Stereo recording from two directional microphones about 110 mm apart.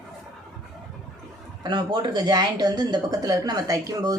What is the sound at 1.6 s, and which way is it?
Speech, 40° right (ahead or behind).